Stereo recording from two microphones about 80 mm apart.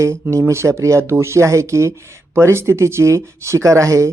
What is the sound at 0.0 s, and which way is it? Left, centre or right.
Speech, right.